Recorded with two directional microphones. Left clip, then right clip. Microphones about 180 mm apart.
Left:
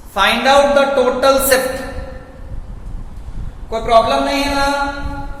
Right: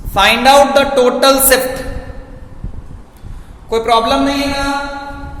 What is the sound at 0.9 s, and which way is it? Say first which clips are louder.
Music: right 3 dB; 50° right (ahead or behind).